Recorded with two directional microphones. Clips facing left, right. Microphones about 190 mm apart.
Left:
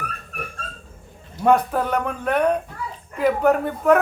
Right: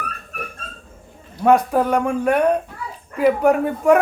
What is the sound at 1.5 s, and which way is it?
A woman's voice, 10° right (ahead or behind).